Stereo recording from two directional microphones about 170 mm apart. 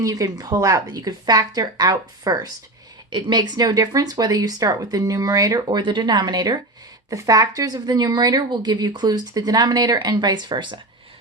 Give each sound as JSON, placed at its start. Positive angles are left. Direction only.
{"t": 0.0, "sound": "a woman's voice", "side_deg": -20}